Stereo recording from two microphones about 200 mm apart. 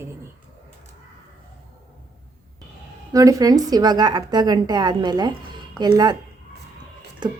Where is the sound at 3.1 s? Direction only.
15° right (ahead or behind).